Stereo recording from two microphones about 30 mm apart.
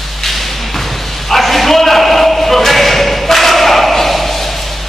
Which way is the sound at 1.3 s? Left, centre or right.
Centre.